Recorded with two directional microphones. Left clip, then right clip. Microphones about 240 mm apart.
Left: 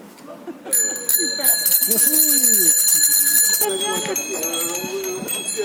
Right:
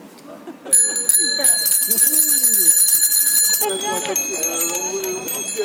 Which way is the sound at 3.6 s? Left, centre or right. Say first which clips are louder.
Even; right.